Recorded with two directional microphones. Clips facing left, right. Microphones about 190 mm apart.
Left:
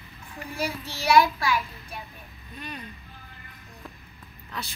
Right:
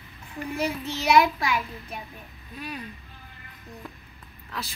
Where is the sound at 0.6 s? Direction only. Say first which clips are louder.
Right 2 dB; 20° right (ahead or behind).